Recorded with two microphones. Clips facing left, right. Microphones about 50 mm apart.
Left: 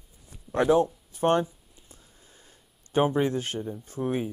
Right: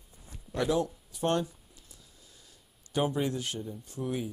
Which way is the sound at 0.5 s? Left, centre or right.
Left.